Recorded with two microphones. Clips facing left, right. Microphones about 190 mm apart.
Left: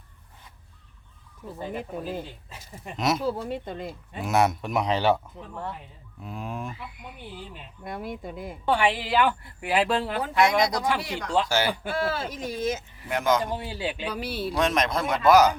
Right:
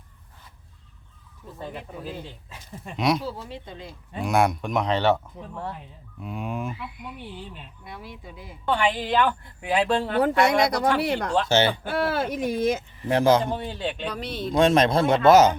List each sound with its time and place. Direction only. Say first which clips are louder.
2.9 s speech: right 2 dB; centre (ahead or behind)
3.2 s speech: left 5 dB; 50° left (ahead or behind)
4.2 s speech: right 1 dB; centre (ahead or behind)
7.9 s speech: left 7 dB; 50° left (ahead or behind)
8.6 s speech: even; 10° left (ahead or behind)
10.2 s speech: right 3 dB; 60° right (ahead or behind)
11.4 s speech: right 4 dB; 25° right (ahead or behind)
11.9 s speech: right 3 dB; 60° right (ahead or behind)
13.1 s a man's voice: right 5 dB; 30° right (ahead or behind)
13.4 s speech: right 2 dB; 10° left (ahead or behind)
14.5 s speech: right 7 dB; 30° right (ahead or behind)